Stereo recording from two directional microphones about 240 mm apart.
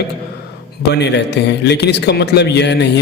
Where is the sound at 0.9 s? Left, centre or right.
Left.